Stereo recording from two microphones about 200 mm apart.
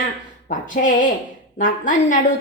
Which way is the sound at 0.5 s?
40° left (ahead or behind).